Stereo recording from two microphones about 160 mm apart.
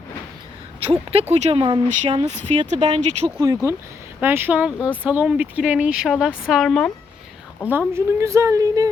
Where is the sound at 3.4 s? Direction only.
20° right (ahead or behind); by 6.9 s centre (ahead or behind).